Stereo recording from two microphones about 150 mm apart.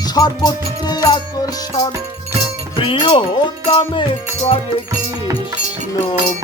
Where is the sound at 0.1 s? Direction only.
25° left (ahead or behind).